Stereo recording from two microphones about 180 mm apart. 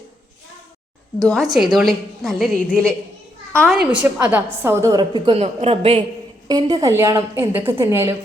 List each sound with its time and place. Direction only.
1.3 s a woman's voice: centre (ahead or behind)